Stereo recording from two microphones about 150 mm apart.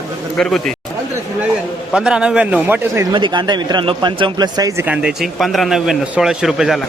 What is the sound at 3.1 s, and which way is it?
Speech, 30° right (ahead or behind).